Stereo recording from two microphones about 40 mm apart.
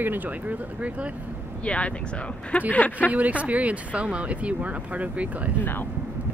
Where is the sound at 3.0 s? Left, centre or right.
Right.